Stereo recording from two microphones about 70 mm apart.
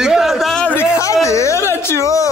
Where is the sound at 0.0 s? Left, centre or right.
Centre.